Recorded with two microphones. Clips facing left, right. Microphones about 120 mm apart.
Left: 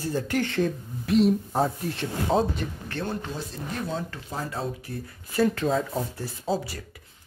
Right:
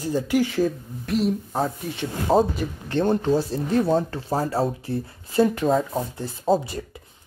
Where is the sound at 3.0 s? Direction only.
45° right (ahead or behind).